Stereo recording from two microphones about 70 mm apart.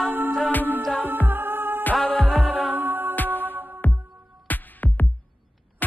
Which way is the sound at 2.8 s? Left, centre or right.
Right.